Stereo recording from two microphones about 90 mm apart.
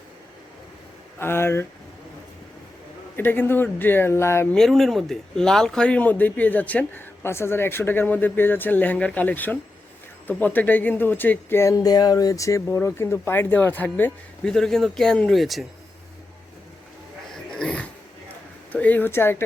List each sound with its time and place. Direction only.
1.2 s speech: 25° left (ahead or behind)
3.2 s speech: 25° left (ahead or behind)
4.5 s speech: 5° left (ahead or behind); by 12.6 s 35° left (ahead or behind)
12.6 s speech: 25° left (ahead or behind)
14.5 s speech: 5° left (ahead or behind)
17.6 s dog: 15° left (ahead or behind)
18.7 s speech: 20° left (ahead or behind)